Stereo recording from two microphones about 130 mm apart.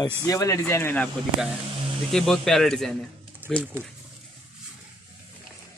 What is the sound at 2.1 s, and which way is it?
Speech, centre (ahead or behind).